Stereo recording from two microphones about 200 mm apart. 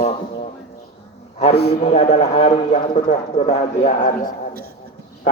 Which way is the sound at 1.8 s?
30° left (ahead or behind).